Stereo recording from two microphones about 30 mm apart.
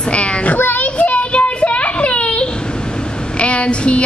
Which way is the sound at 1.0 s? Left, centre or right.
Left.